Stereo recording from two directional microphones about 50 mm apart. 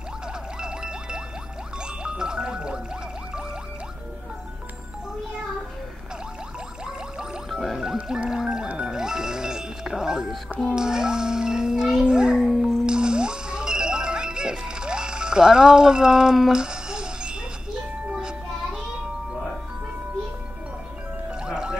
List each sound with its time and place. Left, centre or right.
0.6 s music: centre
7.4 s music: centre
10.7 s chime: centre
12.8 s music: centre
16.5 s a sound: centre
18.1 s music: centre
21.3 s music: centre